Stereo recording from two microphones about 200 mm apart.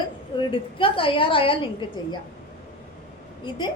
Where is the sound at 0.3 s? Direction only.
25° left (ahead or behind).